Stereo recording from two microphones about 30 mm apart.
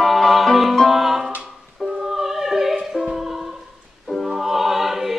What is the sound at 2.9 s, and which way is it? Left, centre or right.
Music, centre.